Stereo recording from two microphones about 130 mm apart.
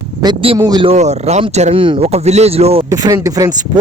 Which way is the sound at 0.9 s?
60° right (ahead or behind).